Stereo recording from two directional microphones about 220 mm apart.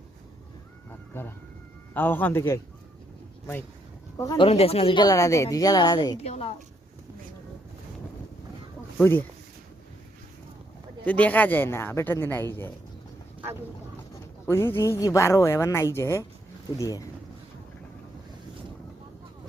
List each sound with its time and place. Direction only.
1.9 s a woman's voice: 10° left (ahead or behind)
4.2 s a woman's voice: 15° left (ahead or behind)
4.4 s a woman's voice: 25° left (ahead or behind)
9.0 s speech: 10° left (ahead or behind)
11.0 s a woman's voice: 5° left (ahead or behind)
14.4 s a woman's voice: 10° left (ahead or behind)